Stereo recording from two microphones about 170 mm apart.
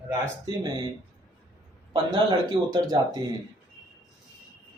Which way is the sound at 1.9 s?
30° right (ahead or behind).